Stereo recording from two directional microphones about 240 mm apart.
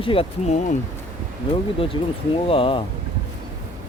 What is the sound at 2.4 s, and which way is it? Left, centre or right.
Speech, left.